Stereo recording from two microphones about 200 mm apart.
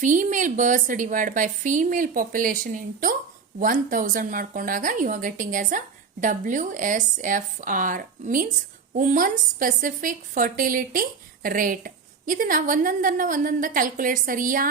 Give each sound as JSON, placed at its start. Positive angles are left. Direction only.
{"t": 0.0, "sound": "a woman's voice", "side_deg": -40}